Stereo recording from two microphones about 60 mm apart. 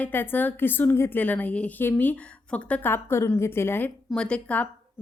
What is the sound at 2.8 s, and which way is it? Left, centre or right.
A woman's voice, left.